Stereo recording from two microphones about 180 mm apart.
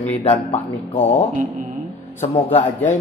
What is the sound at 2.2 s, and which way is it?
Speech, 40° left (ahead or behind).